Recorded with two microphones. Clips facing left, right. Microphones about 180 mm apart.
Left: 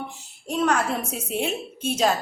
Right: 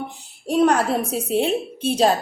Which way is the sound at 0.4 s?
35° right (ahead or behind).